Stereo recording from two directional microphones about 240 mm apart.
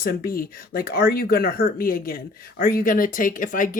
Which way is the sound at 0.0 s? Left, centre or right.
Left.